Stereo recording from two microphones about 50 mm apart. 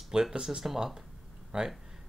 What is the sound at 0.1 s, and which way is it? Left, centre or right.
Speech, centre.